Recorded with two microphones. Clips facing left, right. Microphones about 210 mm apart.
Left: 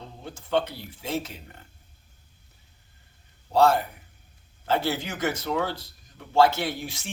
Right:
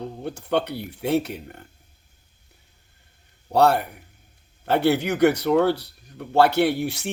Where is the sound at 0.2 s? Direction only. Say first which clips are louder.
Right 2 dB; 65° right (ahead or behind).